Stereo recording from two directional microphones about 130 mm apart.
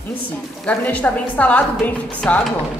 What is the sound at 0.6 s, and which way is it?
A woman's voice, 10° left (ahead or behind).